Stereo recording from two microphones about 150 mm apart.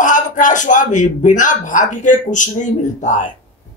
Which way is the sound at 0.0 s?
60° left (ahead or behind).